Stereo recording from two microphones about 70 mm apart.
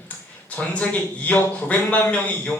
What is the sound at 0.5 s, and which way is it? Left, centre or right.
A man's voice, centre.